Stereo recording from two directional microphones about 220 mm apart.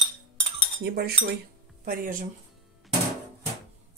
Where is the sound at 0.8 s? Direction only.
45° right (ahead or behind).